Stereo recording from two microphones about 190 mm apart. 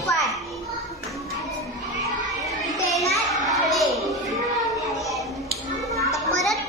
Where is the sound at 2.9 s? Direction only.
Centre (ahead or behind).